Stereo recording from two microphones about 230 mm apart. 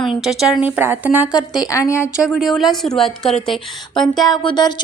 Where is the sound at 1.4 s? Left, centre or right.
Centre.